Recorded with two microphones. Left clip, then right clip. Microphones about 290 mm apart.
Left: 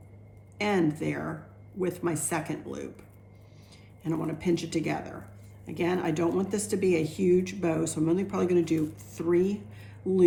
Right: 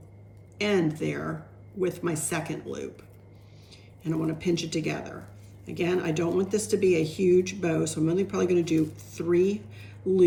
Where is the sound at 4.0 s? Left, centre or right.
Left.